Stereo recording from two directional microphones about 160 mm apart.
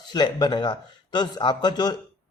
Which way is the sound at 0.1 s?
25° left (ahead or behind).